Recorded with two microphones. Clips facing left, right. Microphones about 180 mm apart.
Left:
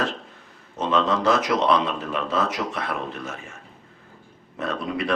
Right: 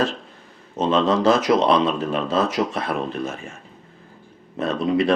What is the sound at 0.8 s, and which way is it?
Speech, 25° right (ahead or behind).